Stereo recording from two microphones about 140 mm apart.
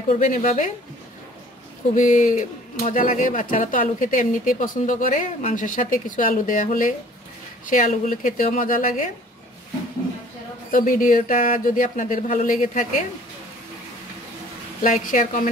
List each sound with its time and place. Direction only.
0.2 s speech: 65° left (ahead or behind)
2.0 s speech: 65° left (ahead or behind)
10.7 s speech: 75° left (ahead or behind)
14.8 s speech: 70° left (ahead or behind)